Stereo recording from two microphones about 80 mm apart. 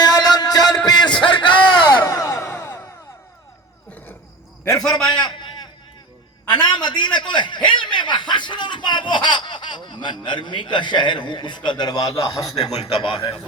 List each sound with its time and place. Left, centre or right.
0.0 s music: left
1.2 s a sound: left
2.0 s a sound: left
4.8 s a man's voice: centre
6.5 s chuckle: left
12.1 s a man's voice: left
13.0 s a man's voice: left